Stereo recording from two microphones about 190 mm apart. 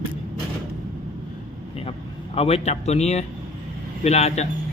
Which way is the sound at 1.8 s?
30° left (ahead or behind).